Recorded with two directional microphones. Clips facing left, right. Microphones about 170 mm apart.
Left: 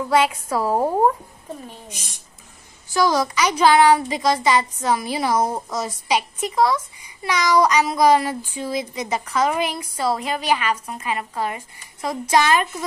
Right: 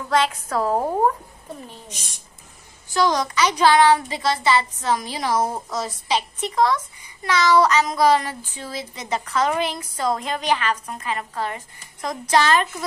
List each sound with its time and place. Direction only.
0.1 s a woman's voice: 10° left (ahead or behind)
2.9 s a woman's voice: 10° left (ahead or behind)